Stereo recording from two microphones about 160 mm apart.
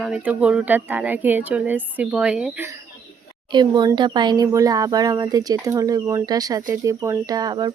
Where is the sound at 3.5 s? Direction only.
25° right (ahead or behind).